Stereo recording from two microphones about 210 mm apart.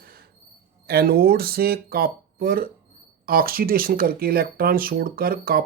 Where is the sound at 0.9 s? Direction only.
45° right (ahead or behind).